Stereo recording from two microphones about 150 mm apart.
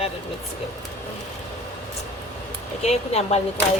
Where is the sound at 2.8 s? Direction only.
45° left (ahead or behind).